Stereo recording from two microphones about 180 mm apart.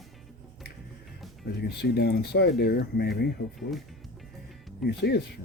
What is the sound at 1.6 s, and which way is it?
Speech, 65° left (ahead or behind).